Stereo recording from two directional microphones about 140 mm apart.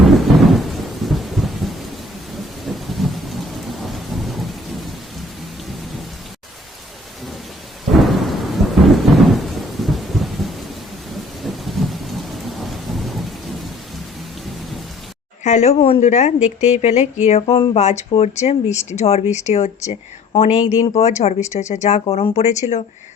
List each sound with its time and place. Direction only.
0.0 s thunder: centre (ahead or behind)
7.9 s thunder: centre (ahead or behind)
15.4 s speech: 55° left (ahead or behind)